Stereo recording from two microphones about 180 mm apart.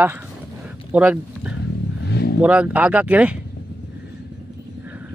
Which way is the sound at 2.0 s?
65° left (ahead or behind).